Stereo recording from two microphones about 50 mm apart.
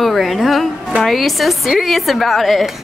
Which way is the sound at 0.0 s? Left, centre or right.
Centre.